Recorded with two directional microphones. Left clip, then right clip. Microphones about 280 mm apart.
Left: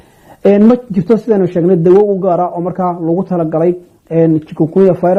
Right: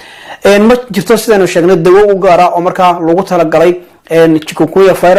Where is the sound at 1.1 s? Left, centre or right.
Centre.